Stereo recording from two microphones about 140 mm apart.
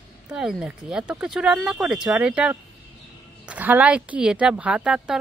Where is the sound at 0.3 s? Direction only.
5° right (ahead or behind).